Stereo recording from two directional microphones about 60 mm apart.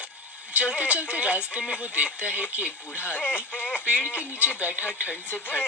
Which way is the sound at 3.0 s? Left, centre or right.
Left.